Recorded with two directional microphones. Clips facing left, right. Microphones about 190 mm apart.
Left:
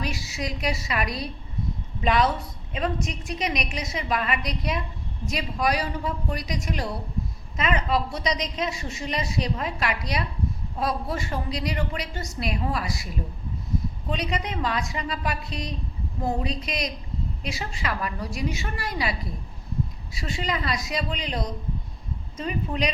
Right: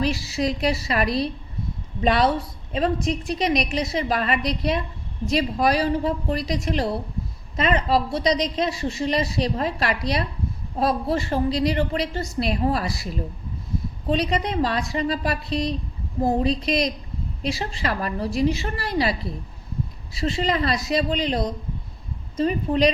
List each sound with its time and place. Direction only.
0.0 s a woman's voice: 30° right (ahead or behind)
14.1 s a woman's voice: 35° right (ahead or behind)
20.2 s a woman's voice: 35° right (ahead or behind)